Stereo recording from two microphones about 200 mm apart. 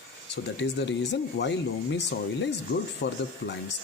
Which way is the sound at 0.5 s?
60° left (ahead or behind).